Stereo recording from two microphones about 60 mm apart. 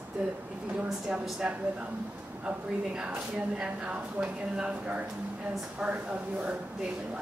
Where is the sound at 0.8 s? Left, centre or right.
Centre.